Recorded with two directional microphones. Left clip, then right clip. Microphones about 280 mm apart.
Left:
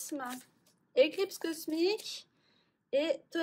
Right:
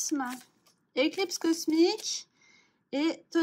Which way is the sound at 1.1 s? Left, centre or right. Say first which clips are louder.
Right 6 dB; right.